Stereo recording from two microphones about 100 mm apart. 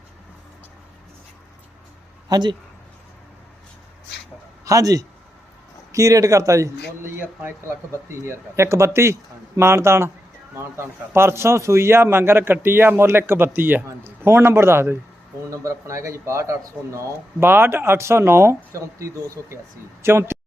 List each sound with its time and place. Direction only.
2.3 s speech: 45° right (ahead or behind)
4.6 s a man's voice: 35° right (ahead or behind)